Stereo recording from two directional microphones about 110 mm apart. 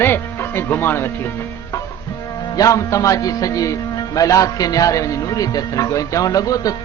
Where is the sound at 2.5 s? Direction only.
30° left (ahead or behind).